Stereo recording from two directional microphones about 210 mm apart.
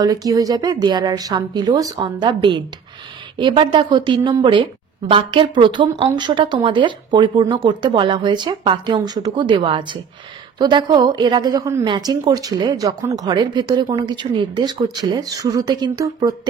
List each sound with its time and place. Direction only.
0.0 s a woman's voice: 15° right (ahead or behind)